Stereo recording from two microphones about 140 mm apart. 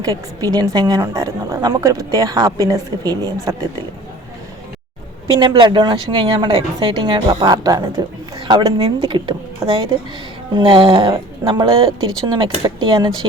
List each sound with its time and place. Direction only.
0.4 s speech: 25° right (ahead or behind)
5.4 s speech: 35° right (ahead or behind)
8.4 s speech: 40° right (ahead or behind)